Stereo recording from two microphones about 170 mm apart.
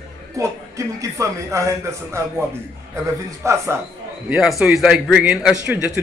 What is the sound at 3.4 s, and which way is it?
Speech, 15° right (ahead or behind).